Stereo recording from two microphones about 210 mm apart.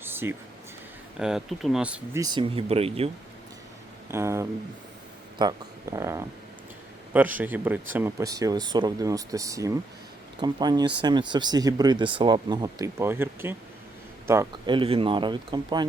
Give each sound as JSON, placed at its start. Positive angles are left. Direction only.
{"t": 0.0, "sound": "a sound", "side_deg": -10}
{"t": 1.2, "sound": "speech", "side_deg": 0}
{"t": 2.2, "sound": "speech", "side_deg": -25}
{"t": 4.1, "sound": "speech", "side_deg": -15}
{"t": 14.8, "sound": "speech", "side_deg": -25}